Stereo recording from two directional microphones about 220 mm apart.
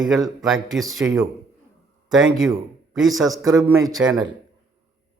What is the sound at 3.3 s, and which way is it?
Speech, 15° right (ahead or behind).